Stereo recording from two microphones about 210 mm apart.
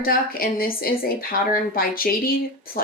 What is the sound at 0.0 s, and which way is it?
Speech, 45° left (ahead or behind).